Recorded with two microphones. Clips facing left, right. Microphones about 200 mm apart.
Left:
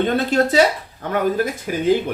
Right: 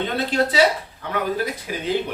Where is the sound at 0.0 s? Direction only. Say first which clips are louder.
Left 4 dB; 45° left (ahead or behind).